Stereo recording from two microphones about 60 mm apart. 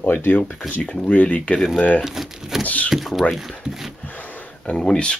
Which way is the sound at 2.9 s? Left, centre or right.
Centre.